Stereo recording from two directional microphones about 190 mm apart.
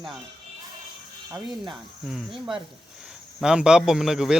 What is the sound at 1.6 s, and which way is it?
Speech, centre (ahead or behind).